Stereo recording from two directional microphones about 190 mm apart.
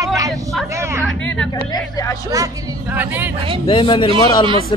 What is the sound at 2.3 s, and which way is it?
Speech, 15° right (ahead or behind).